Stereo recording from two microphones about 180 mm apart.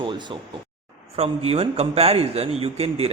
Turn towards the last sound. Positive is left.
turn(degrees=-35)  # may be behind; listen again after turning